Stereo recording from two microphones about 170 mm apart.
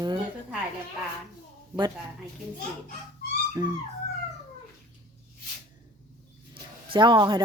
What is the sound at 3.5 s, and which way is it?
Dog, 25° right (ahead or behind).